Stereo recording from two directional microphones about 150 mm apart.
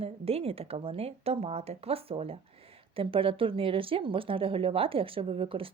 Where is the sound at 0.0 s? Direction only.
40° right (ahead or behind).